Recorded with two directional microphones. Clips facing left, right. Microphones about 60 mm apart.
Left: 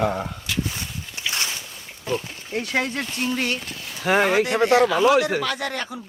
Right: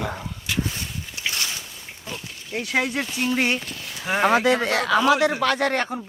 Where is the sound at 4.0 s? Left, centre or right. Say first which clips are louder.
Left 4 dB; left.